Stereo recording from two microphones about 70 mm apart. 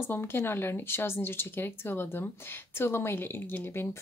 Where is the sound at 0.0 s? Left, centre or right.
Left.